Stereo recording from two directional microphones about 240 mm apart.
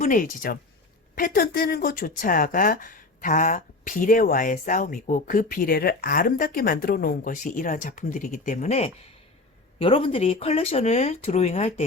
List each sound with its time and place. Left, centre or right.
0.0 s speech: left